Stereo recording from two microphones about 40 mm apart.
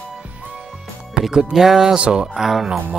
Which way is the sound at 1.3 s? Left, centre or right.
Centre.